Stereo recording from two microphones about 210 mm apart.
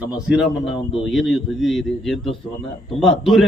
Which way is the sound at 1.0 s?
Centre (ahead or behind).